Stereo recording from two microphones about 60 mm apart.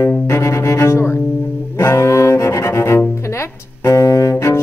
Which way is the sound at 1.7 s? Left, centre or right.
Left.